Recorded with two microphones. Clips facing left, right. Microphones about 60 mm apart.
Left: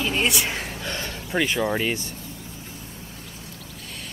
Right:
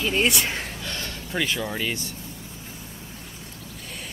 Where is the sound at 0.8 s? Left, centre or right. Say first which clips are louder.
Left 2 dB; centre.